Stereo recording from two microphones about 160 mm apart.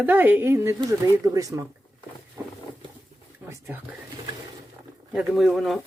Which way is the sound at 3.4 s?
15° right (ahead or behind).